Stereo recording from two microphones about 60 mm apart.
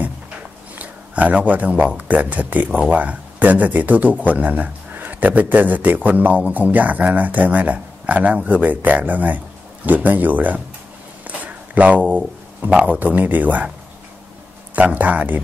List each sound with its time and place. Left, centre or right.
0.7 s speech: right
11.2 s a sound: right
13.0 s speech: right
14.8 s speech: right